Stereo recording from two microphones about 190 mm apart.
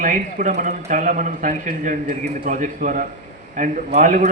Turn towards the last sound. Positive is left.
turn(degrees=-40)  # may be behind; listen again after turning